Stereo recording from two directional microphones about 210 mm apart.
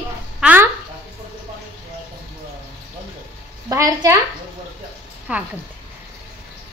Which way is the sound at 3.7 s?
15° right (ahead or behind).